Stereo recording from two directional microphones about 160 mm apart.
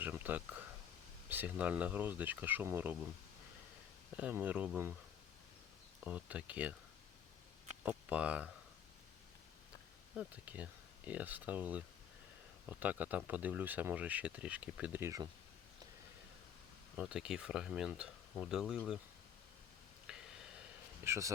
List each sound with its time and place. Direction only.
0.0 s speech: 10° right (ahead or behind)
4.2 s speech: 10° right (ahead or behind)
6.1 s speech: 10° right (ahead or behind)
7.9 s speech: 10° right (ahead or behind)
10.2 s speech: 10° right (ahead or behind)
12.8 s speech: 10° right (ahead or behind)
17.0 s speech: 5° right (ahead or behind)
20.1 s a sound: 5° right (ahead or behind)
21.0 s speech: 20° right (ahead or behind)